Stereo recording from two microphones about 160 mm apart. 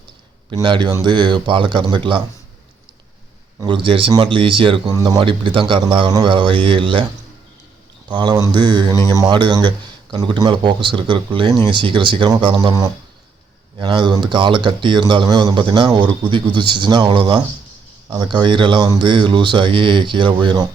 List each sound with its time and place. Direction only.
0.5 s speech: 30° right (ahead or behind)
3.6 s speech: 30° right (ahead or behind)
8.0 s speech: 30° right (ahead or behind)